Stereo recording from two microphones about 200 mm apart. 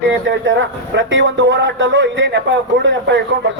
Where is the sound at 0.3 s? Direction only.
65° right (ahead or behind).